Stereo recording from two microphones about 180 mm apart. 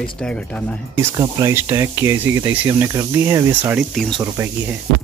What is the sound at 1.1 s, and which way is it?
Speech, 15° right (ahead or behind).